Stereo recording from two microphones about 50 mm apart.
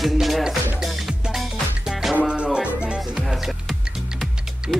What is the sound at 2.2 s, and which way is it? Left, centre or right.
Music, centre.